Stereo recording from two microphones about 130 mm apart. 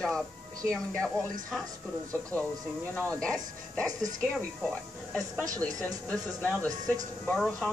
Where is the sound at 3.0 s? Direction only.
10° left (ahead or behind).